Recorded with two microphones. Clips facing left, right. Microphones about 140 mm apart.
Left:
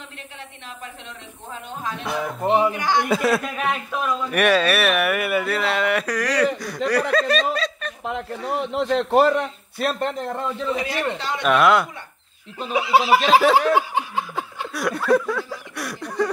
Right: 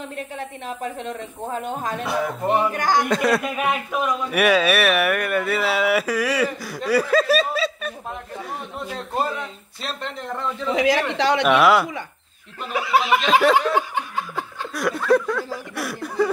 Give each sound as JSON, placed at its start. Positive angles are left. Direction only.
{"t": 1.0, "sound": "speech", "side_deg": -45}
{"t": 2.4, "sound": "speech", "side_deg": 15}
{"t": 2.7, "sound": "speech", "side_deg": -45}
{"t": 3.1, "sound": "a man's voice", "side_deg": 0}
{"t": 7.5, "sound": "a sound", "side_deg": -5}
{"t": 8.0, "sound": "a man's voice", "side_deg": 90}
{"t": 10.7, "sound": "speech", "side_deg": -90}
{"t": 11.4, "sound": "a man's voice", "side_deg": -5}
{"t": 12.7, "sound": "chuckle", "side_deg": 25}
{"t": 13.3, "sound": "a man's voice", "side_deg": 0}
{"t": 13.7, "sound": "laughter", "side_deg": 10}
{"t": 14.7, "sound": "a sound", "side_deg": 0}